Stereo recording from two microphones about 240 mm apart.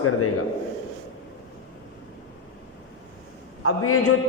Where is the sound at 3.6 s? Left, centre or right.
Left.